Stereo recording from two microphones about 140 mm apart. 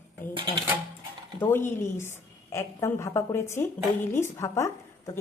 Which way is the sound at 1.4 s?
15° left (ahead or behind).